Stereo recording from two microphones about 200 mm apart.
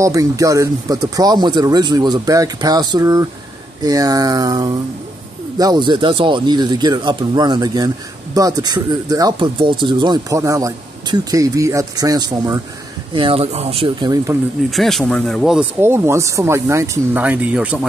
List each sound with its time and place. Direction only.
0.0 s speech: 15° right (ahead or behind)
14.7 s speech: centre (ahead or behind)
15.8 s speech: 15° right (ahead or behind)